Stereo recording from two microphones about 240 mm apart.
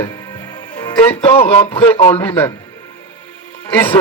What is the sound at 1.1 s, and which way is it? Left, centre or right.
Speech, centre.